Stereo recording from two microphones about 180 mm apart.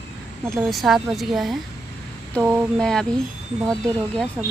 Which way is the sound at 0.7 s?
Centre (ahead or behind).